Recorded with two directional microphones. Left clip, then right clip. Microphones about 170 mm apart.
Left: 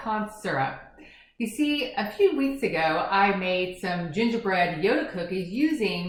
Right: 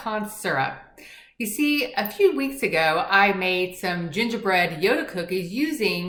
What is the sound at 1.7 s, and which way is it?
A woman's voice, 15° right (ahead or behind).